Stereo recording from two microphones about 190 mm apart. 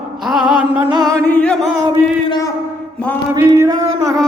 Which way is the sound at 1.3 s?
5° left (ahead or behind).